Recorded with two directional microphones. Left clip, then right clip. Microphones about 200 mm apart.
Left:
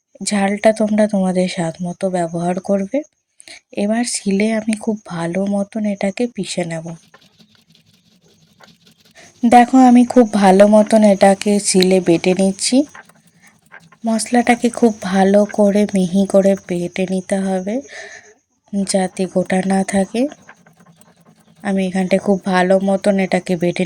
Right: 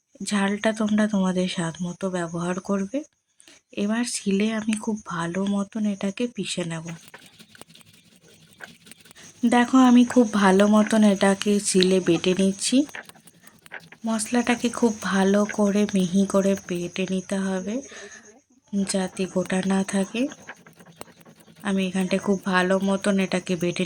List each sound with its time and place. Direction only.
0.2 s speech: 25° left (ahead or behind)
9.5 s speech: 25° left (ahead or behind)
14.0 s speech: 20° left (ahead or behind)
21.6 s speech: 25° left (ahead or behind)